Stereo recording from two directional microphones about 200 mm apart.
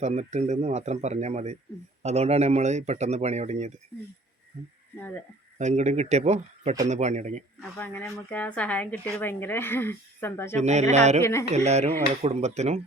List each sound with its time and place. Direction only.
0.0 s speech: 35° right (ahead or behind)
5.5 s speech: 35° right (ahead or behind)
7.8 s speech: 10° left (ahead or behind)
10.6 s speech: 35° right (ahead or behind)
11.2 s speech: 15° left (ahead or behind)
11.5 s speech: 35° right (ahead or behind)